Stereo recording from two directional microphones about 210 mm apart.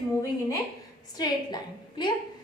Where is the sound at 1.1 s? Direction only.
20° left (ahead or behind).